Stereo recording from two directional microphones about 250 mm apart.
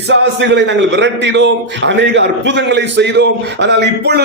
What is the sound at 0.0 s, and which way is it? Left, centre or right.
A man's voice, right.